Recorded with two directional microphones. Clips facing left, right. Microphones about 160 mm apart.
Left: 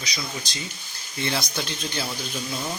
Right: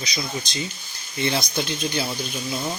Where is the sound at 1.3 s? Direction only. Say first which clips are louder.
Right 4 dB; 20° right (ahead or behind).